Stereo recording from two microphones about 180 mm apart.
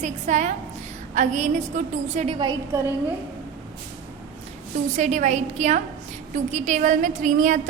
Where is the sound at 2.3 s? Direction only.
25° right (ahead or behind).